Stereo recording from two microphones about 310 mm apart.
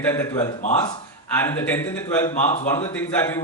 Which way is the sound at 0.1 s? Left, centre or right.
Centre.